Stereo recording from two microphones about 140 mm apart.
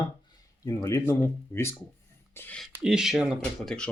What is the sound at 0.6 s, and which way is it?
Speech, 20° left (ahead or behind).